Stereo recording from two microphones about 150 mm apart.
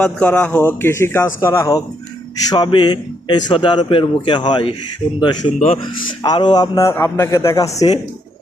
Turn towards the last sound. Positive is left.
turn(degrees=20)  # may be behind; listen again after turning